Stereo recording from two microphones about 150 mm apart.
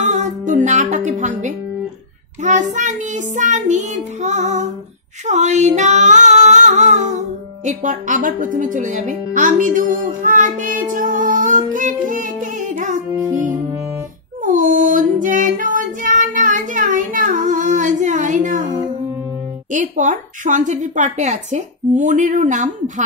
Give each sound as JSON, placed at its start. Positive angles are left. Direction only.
{"t": 0.0, "sound": "music", "side_deg": -55}
{"t": 2.4, "sound": "child singing", "side_deg": -55}
{"t": 5.2, "sound": "female singing", "side_deg": -50}
{"t": 7.6, "sound": "speech", "side_deg": -55}
{"t": 11.7, "sound": "music", "side_deg": -60}
{"t": 14.4, "sound": "female singing", "side_deg": -60}
{"t": 19.7, "sound": "speech", "side_deg": -55}